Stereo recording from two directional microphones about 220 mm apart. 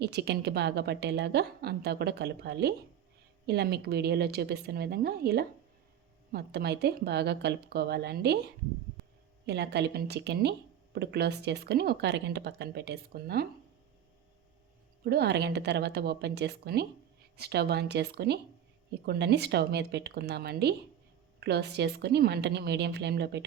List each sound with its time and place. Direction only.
0.0 s a woman's voice: 50° right (ahead or behind)
9.5 s a woman's voice: 50° right (ahead or behind)
15.0 s a woman's voice: 45° right (ahead or behind)